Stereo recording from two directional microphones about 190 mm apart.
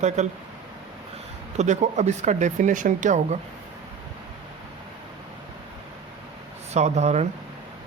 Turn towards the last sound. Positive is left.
turn(degrees=-35)  # may be behind; listen again after turning